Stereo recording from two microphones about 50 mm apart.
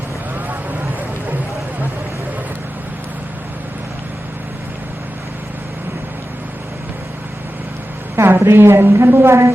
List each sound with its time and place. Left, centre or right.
8.1 s a woman's voice: right